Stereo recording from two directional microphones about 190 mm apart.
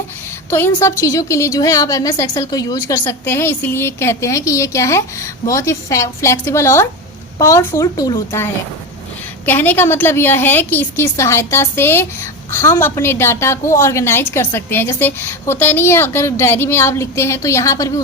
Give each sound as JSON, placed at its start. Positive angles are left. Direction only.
{"t": 0.5, "sound": "a woman's voice", "side_deg": 15}
{"t": 9.5, "sound": "a woman's voice", "side_deg": 10}